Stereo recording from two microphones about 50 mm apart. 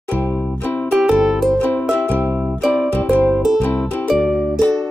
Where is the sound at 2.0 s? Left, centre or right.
Left.